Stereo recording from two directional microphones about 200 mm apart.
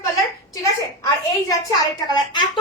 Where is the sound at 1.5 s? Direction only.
20° left (ahead or behind).